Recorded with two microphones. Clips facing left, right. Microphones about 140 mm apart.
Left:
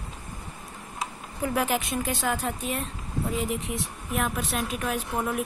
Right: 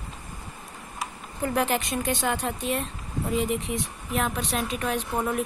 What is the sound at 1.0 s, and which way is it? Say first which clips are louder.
Speech: even; 5° left (ahead or behind).